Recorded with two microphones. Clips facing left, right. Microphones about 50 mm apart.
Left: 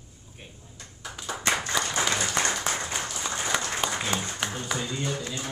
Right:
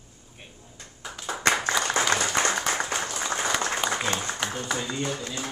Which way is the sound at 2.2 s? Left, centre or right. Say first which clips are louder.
Right 2 dB; right.